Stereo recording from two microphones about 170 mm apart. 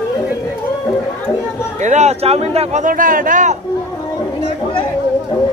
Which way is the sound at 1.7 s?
45° right (ahead or behind).